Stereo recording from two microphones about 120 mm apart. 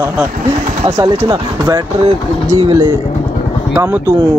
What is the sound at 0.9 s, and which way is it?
Speech, 30° right (ahead or behind).